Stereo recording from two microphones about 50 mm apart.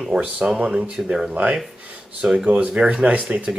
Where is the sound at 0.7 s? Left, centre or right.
Centre.